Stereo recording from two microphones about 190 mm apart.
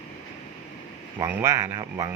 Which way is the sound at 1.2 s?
15° right (ahead or behind).